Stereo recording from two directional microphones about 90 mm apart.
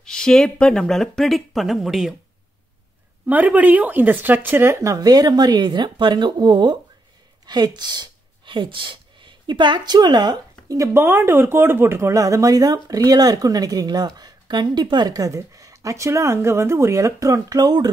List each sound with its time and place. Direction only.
0.0 s speech: 5° left (ahead or behind)
3.3 s speech: 20° right (ahead or behind)
4.8 s speech: 45° right (ahead or behind)
10.9 s speech: 25° right (ahead or behind); by 17.8 s 45° right (ahead or behind)